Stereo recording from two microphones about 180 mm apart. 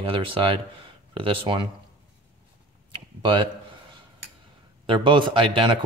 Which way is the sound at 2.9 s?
30° right (ahead or behind).